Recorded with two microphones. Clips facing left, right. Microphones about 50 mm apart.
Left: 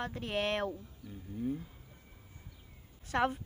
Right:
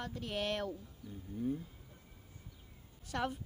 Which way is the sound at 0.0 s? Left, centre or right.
Left.